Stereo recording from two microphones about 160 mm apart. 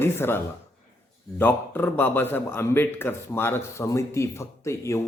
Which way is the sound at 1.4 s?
10° left (ahead or behind).